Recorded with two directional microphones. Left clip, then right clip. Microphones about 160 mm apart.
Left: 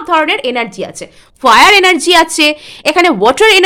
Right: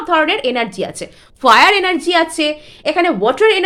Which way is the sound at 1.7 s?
35° left (ahead or behind).